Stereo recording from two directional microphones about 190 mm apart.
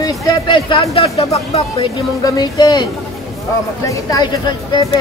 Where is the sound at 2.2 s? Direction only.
20° left (ahead or behind).